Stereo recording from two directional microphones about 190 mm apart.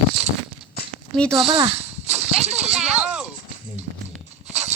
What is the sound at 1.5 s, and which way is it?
Speech, 15° right (ahead or behind).